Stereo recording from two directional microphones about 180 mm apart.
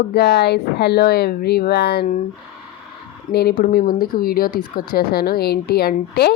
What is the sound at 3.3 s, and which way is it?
Speech, 60° left (ahead or behind).